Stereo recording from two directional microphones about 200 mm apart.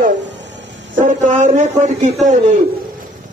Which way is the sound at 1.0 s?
40° right (ahead or behind).